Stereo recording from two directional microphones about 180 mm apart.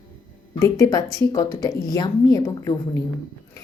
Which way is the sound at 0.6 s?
20° left (ahead or behind).